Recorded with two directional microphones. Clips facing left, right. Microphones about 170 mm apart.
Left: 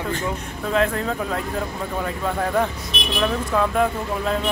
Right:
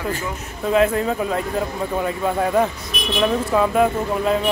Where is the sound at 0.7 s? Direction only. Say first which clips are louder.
Right 4 dB; 5° right (ahead or behind).